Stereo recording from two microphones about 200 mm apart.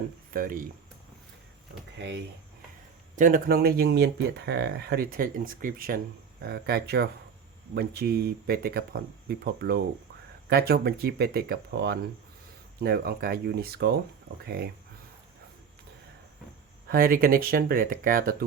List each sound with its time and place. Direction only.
0.3 s speech: 45° right (ahead or behind)
2.0 s speech: 60° right (ahead or behind)
3.2 s speech: 45° right (ahead or behind)
16.9 s speech: 45° right (ahead or behind)